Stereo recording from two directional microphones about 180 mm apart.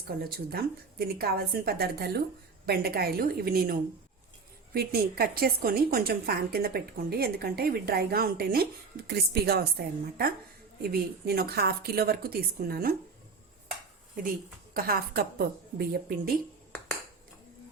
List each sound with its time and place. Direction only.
0.3 s a woman's voice: 60° right (ahead or behind)
14.7 s a woman's voice: 55° right (ahead or behind)